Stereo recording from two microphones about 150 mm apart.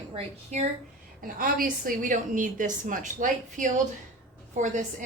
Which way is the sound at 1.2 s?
70° right (ahead or behind).